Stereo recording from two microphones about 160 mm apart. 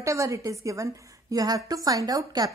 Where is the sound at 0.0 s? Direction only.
20° right (ahead or behind).